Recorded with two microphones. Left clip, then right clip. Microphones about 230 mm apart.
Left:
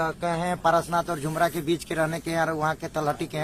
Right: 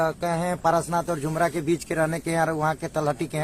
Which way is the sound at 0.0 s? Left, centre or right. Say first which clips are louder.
Right 2 dB; right.